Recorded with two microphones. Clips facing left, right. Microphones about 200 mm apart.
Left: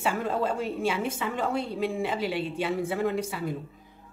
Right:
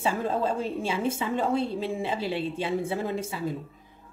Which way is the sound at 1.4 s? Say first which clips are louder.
Even; 30° right (ahead or behind).